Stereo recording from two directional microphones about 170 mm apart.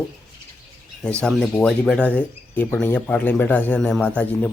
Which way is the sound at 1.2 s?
5° left (ahead or behind).